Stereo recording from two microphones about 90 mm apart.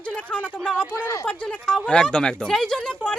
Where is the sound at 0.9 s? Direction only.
35° left (ahead or behind).